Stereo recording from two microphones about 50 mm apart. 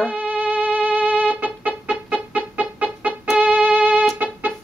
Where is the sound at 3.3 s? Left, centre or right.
Right.